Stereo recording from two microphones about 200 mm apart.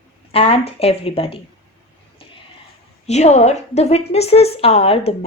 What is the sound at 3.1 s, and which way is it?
A woman's voice, 35° left (ahead or behind).